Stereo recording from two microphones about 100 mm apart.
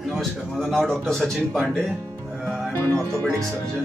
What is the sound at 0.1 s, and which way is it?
Speech, 5° left (ahead or behind).